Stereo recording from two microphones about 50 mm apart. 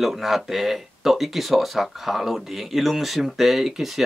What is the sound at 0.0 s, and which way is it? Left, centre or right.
Speech, centre.